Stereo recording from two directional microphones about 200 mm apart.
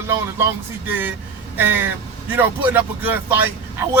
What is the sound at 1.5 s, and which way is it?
Speech, 10° right (ahead or behind).